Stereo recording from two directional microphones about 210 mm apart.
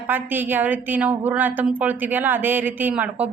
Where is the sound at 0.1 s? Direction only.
10° right (ahead or behind).